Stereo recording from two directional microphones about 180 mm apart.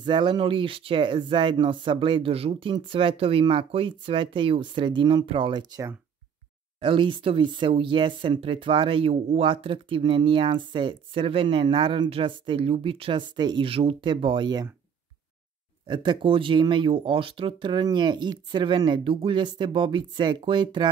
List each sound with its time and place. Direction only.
0.0 s speech: 25° right (ahead or behind)
15.9 s speech: 25° right (ahead or behind)